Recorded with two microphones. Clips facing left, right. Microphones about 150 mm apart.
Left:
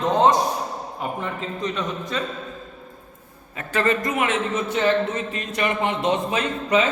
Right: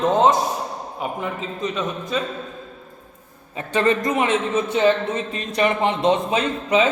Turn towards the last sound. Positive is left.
turn(degrees=-20)  # may be behind; listen again after turning